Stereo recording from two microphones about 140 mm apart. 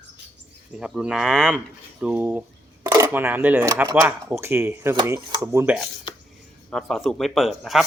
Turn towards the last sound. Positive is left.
turn(degrees=0)  # may be behind; listen again after turning